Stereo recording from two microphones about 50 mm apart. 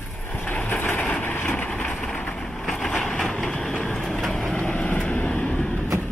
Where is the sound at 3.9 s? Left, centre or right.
Centre.